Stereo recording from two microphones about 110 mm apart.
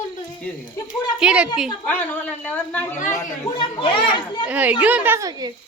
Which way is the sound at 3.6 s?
50° left (ahead or behind).